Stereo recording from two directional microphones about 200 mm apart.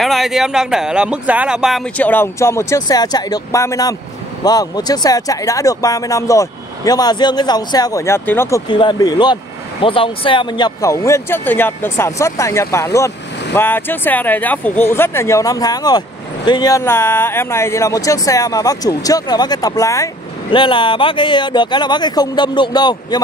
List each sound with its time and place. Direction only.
0.0 s speech: centre (ahead or behind); by 23.2 s 20° left (ahead or behind)